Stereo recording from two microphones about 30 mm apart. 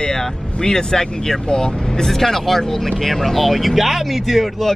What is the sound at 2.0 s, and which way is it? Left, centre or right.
Speech, centre.